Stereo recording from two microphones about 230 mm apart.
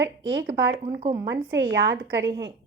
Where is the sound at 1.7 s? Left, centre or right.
Right.